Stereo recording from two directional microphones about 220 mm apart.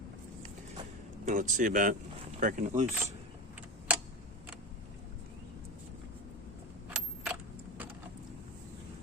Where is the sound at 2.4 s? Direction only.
35° right (ahead or behind).